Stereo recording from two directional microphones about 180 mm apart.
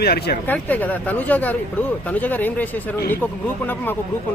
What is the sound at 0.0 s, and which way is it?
Speech, 60° left (ahead or behind).